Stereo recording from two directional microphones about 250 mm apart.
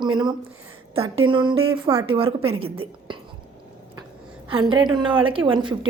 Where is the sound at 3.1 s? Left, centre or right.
Right.